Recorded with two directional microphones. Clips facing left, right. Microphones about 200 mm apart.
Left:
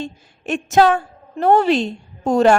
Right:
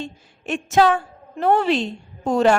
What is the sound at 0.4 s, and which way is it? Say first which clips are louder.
A woman's voice: left 2 dB; 40° left (ahead or behind).